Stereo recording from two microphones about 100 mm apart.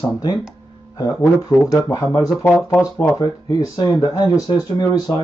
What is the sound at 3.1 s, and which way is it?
Speech, 35° left (ahead or behind).